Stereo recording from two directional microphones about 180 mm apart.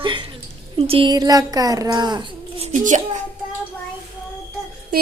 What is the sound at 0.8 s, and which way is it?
Speech, 30° right (ahead or behind).